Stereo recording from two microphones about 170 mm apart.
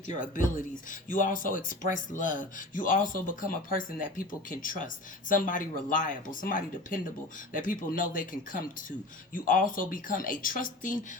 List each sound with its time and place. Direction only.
0.1 s speech: 50° left (ahead or behind)